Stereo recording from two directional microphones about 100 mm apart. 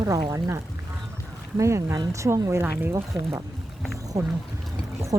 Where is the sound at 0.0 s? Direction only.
35° right (ahead or behind).